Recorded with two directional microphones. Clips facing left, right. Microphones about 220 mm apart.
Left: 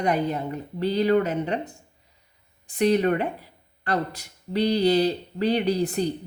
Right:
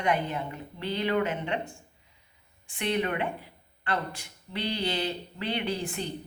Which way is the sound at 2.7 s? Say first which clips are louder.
Left 8 dB; 40° left (ahead or behind).